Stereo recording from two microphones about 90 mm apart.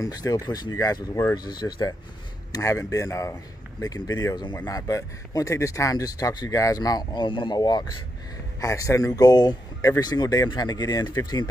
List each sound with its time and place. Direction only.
0.0 s speech: 40° left (ahead or behind)
1.3 s speech: 50° left (ahead or behind)
2.5 s speech: 35° left (ahead or behind); by 7.8 s 55° left (ahead or behind)
8.5 s speech: 40° left (ahead or behind)